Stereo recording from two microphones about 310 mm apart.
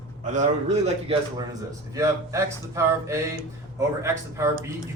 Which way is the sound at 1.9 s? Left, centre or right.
Centre.